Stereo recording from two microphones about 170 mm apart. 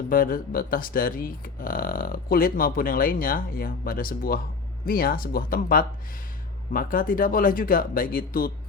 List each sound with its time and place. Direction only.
0.1 s speech: 55° left (ahead or behind)